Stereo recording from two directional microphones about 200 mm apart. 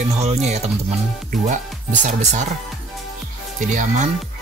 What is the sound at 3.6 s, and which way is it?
Speech, 40° right (ahead or behind).